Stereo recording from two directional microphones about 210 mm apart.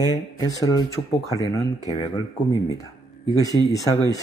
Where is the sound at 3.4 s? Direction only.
15° left (ahead or behind).